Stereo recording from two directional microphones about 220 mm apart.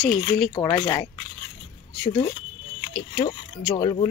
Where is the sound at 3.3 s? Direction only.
15° left (ahead or behind).